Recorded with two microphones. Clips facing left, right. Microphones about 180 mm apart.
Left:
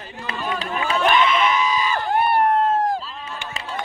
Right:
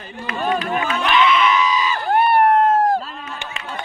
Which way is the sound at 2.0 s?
55° right (ahead or behind).